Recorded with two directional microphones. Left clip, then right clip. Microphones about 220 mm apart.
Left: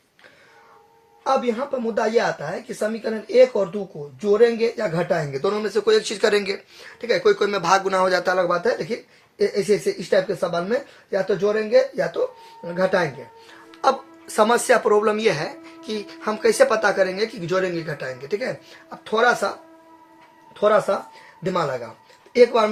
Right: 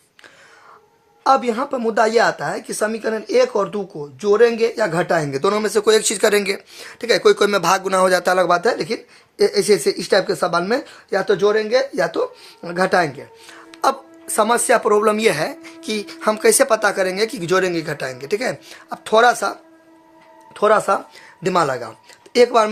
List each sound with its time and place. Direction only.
1.2 s speech: 45° right (ahead or behind)
13.7 s speech: 30° right (ahead or behind)
22.3 s speech: 45° right (ahead or behind)